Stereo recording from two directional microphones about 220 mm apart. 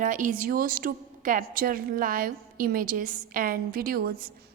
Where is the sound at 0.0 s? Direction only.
35° right (ahead or behind).